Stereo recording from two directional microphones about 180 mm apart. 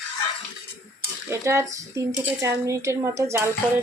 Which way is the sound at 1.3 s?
15° right (ahead or behind).